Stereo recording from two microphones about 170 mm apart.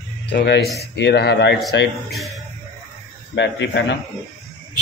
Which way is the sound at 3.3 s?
90° left.